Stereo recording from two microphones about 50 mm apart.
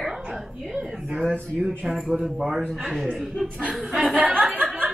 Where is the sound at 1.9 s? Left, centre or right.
Centre.